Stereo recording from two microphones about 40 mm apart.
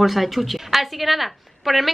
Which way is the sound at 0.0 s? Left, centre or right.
Centre.